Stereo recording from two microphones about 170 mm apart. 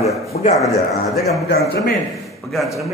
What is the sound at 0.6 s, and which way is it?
A man's voice, centre (ahead or behind).